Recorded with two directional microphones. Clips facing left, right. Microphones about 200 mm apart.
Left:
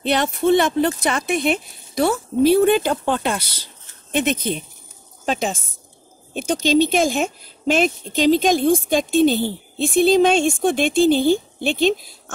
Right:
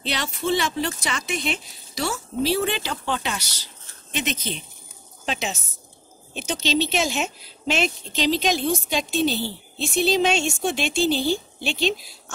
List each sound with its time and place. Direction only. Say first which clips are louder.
0.0 s speech: left 9 dB; 55° left (ahead or behind)